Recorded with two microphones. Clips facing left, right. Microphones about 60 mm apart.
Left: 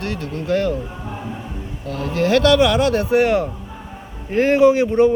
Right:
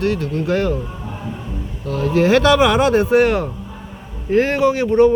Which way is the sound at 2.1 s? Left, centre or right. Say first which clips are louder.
Right 1 dB; centre.